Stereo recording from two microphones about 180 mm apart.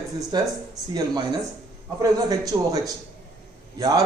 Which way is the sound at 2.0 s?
20° right (ahead or behind).